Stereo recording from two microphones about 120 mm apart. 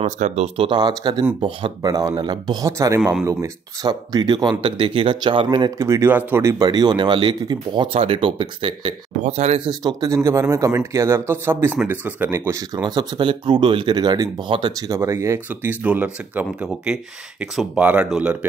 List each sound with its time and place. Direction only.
0.0 s speech: 80° right
0.6 s speech: 40° right (ahead or behind)
1.8 s speech: 30° right (ahead or behind)
5.8 s speech: 25° right (ahead or behind)
6.6 s speech: 35° right (ahead or behind)
9.2 s speech: 65° right (ahead or behind)
9.7 s speech: 35° right (ahead or behind)
14.9 s speech: 25° right (ahead or behind)